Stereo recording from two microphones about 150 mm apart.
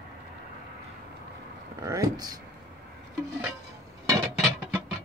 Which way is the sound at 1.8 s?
25° right (ahead or behind).